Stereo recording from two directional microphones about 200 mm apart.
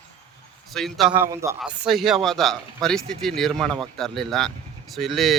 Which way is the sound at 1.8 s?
Centre (ahead or behind).